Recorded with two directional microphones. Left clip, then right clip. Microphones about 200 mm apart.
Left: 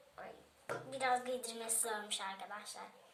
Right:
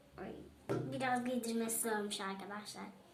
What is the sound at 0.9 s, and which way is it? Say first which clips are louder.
A woman's voice: left 3 dB; 35° right (ahead or behind).